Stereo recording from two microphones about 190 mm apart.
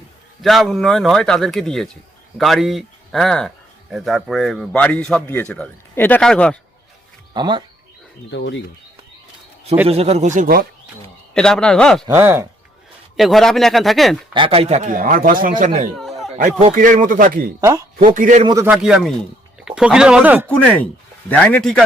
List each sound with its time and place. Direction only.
0.4 s a man's voice: centre (ahead or behind)
7.3 s speech: 25° right (ahead or behind)
8.3 s speech: 70° left (ahead or behind)
9.8 s speech: 30° right (ahead or behind); by 10.7 s 50° right (ahead or behind)
11.3 s a man's voice: 5° left (ahead or behind)
12.0 s speech: 10° right (ahead or behind)
13.1 s a man's voice: centre (ahead or behind)
14.3 s speech: 30° right (ahead or behind)
16.0 s a sound: centre (ahead or behind)
16.4 s speech: 35° right (ahead or behind)
17.6 s speech: 15° right (ahead or behind)
18.0 s speech: 40° right (ahead or behind)
18.4 s a man's voice: 15° right (ahead or behind)
21.2 s a man's voice: 5° left (ahead or behind)